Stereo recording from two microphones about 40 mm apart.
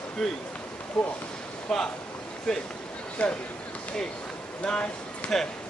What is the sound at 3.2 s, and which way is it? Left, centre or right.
Speech, left.